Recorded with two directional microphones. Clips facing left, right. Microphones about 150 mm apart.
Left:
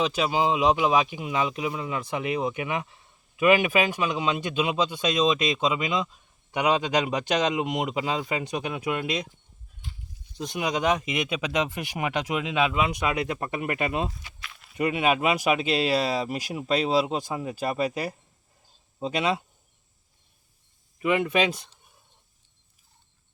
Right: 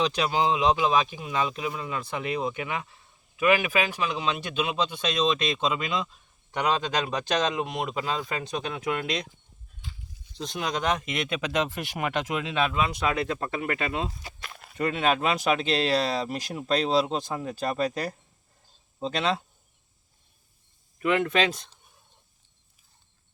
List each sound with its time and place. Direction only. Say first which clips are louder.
0.0 s speech: left 1 dB; 5° left (ahead or behind)
9.8 s a sound: left 1 dB; 90° right
10.3 s speech: left 2 dB; 10° left (ahead or behind)
14.2 s walk: right 3 dB; 40° right (ahead or behind)
14.8 s speech: left 1 dB; 10° left (ahead or behind)
21.0 s speech: left 1 dB; 10° left (ahead or behind)